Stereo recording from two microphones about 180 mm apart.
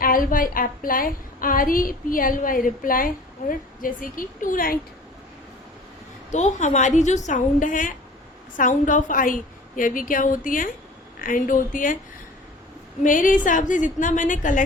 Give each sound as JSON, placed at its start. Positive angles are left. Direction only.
{"t": 0.0, "sound": "a woman's voice", "side_deg": 50}
{"t": 6.3, "sound": "a woman's voice", "side_deg": 40}
{"t": 13.0, "sound": "a woman's voice", "side_deg": 45}